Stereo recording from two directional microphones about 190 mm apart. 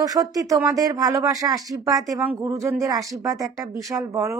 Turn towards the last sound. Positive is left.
turn(degrees=-15)  # may be behind; listen again after turning